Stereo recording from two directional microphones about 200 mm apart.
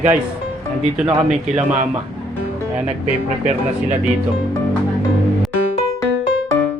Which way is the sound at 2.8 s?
35° right (ahead or behind).